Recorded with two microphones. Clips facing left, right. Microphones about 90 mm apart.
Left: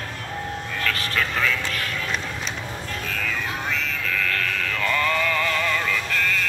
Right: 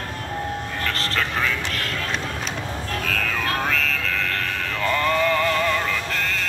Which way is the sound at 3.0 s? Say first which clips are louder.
Right 3 dB; 65° right (ahead or behind).